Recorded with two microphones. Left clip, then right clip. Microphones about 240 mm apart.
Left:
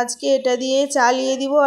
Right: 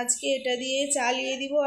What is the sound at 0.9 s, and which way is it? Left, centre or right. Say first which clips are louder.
Speech: left 10 dB; left.